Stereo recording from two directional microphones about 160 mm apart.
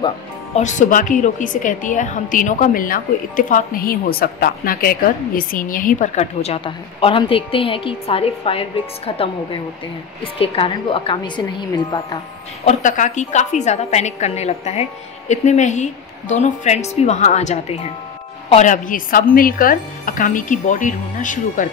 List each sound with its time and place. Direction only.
0.6 s a woman's voice: 50° left (ahead or behind); by 11.4 s 30° left (ahead or behind)
12.6 s a woman's voice: 50° left (ahead or behind)